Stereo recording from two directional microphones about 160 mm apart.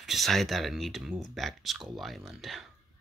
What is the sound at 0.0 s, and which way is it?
Speech, centre (ahead or behind).